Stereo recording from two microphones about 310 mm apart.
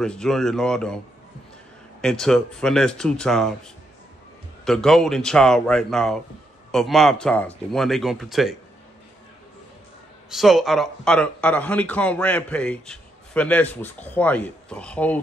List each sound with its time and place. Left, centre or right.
0.0 s speech: centre
2.0 s speech: centre
4.6 s speech: centre
10.3 s speech: centre